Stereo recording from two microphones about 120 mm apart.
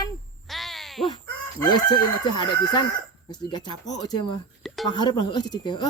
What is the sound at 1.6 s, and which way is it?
A woman's voice, 40° left (ahead or behind).